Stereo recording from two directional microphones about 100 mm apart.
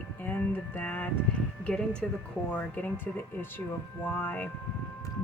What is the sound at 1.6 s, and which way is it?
A woman's voice, 10° left (ahead or behind).